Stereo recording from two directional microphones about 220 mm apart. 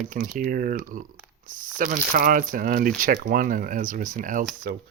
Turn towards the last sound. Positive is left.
turn(degrees=-40)  # may be behind; listen again after turning